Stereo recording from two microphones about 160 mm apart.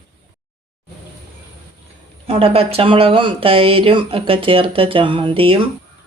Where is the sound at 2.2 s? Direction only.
40° right (ahead or behind).